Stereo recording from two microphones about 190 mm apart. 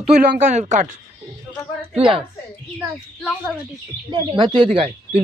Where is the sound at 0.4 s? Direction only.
40° right (ahead or behind).